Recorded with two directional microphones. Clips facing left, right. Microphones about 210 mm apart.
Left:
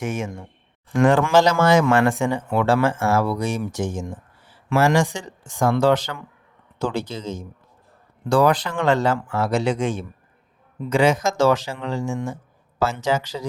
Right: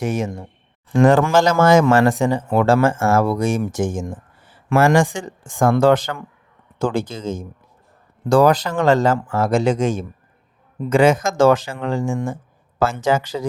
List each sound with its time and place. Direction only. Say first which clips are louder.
0.0 s speech: right 4 dB; 35° right (ahead or behind)